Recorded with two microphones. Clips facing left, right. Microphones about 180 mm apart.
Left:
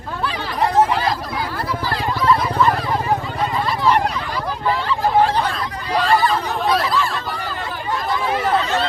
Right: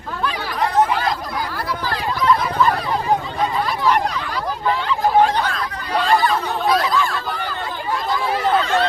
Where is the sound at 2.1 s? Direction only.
5° left (ahead or behind).